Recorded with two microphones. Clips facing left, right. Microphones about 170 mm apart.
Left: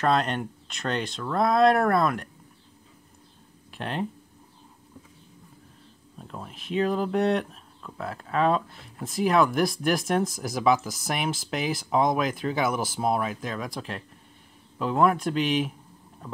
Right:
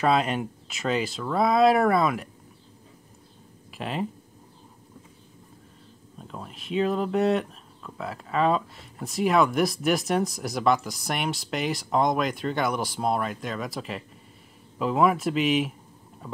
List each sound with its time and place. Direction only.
0.0 s speech: 5° right (ahead or behind)
3.7 s speech: centre (ahead or behind)
6.1 s speech: centre (ahead or behind)